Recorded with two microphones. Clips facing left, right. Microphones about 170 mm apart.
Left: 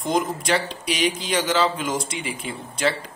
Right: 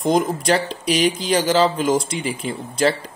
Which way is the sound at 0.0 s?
35° right (ahead or behind).